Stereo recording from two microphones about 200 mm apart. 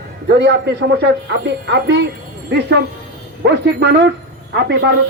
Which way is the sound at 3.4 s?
55° right (ahead or behind).